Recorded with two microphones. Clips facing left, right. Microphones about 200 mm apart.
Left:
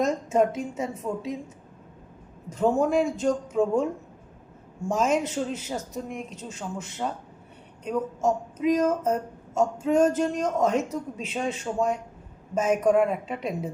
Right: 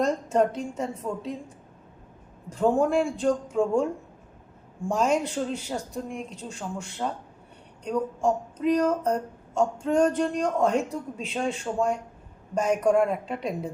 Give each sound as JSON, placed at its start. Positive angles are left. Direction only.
{"t": 0.0, "sound": "a woman's voice", "side_deg": 5}
{"t": 2.5, "sound": "speech", "side_deg": 0}
{"t": 4.9, "sound": "speech", "side_deg": 5}